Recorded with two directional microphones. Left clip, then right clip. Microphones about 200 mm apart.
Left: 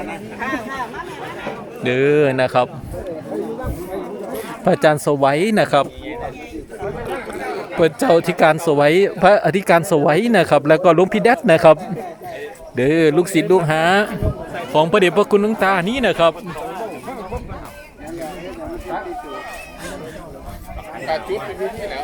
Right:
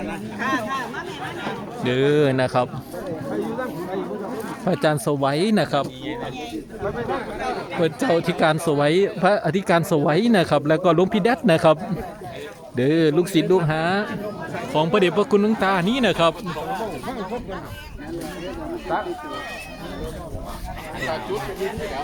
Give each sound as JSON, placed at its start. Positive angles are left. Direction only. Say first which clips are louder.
{"t": 0.3, "sound": "speech", "louder": "even", "side_deg": -50}
{"t": 1.8, "sound": "speech", "louder": "left 4 dB", "side_deg": 5}
{"t": 4.6, "sound": "speech", "louder": "left 7 dB", "side_deg": 10}
{"t": 7.8, "sound": "speech", "louder": "left 7 dB", "side_deg": 10}